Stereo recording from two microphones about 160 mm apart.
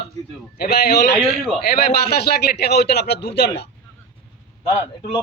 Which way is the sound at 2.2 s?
85° left.